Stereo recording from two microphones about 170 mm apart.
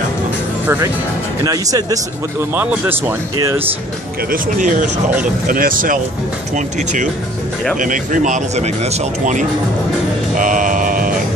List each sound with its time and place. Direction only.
1.4 s speech: 20° right (ahead or behind)
4.3 s speech: 50° right (ahead or behind)
10.3 s music: 50° right (ahead or behind)